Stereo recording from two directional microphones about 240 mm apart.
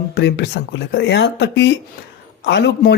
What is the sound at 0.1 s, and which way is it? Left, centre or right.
Speech, left.